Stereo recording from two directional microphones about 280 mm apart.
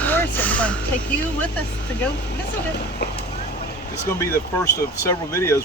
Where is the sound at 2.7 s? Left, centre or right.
Left.